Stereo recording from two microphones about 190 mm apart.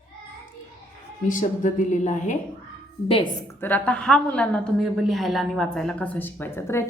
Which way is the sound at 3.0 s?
30° left (ahead or behind).